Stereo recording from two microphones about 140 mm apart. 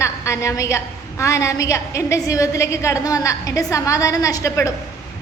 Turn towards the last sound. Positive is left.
turn(degrees=25)  # may be behind; listen again after turning